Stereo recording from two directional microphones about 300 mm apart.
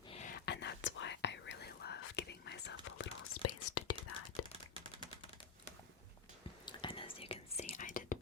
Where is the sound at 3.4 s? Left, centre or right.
Left.